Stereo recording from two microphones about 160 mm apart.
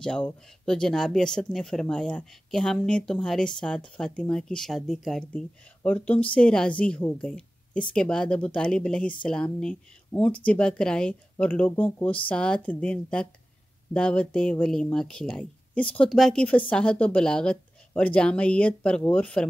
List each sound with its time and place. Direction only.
0.0 s speech: 5° left (ahead or behind)